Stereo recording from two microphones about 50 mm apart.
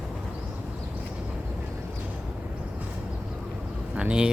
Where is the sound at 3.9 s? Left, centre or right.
Centre.